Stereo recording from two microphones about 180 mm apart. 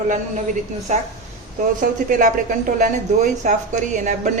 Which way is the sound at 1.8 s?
45° right (ahead or behind).